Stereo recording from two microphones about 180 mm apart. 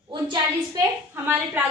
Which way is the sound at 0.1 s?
25° right (ahead or behind).